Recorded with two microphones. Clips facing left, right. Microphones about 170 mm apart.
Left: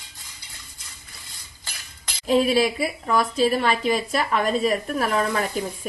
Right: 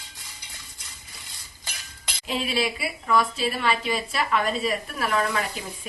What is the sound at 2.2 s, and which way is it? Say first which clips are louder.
A woman's voice: left 8 dB; 40° left (ahead or behind).